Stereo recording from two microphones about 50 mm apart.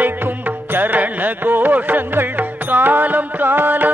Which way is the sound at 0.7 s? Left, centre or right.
Right.